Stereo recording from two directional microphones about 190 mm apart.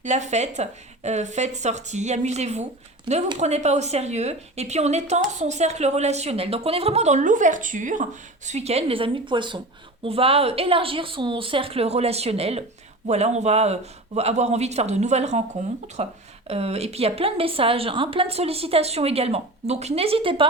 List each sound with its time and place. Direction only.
0.0 s a woman's voice: 40° right (ahead or behind)